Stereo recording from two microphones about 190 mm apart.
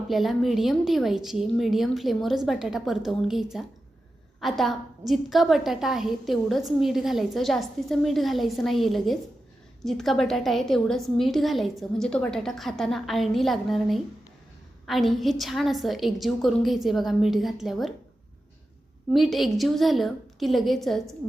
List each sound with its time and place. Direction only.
0.1 s a woman's voice: centre (ahead or behind)
19.1 s a woman's voice: centre (ahead or behind)